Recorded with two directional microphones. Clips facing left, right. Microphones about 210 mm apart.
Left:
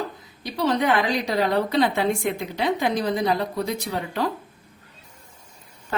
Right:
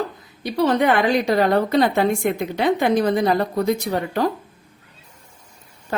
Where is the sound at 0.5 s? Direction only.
55° right (ahead or behind).